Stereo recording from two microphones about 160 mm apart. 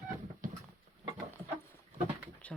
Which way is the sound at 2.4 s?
10° left (ahead or behind).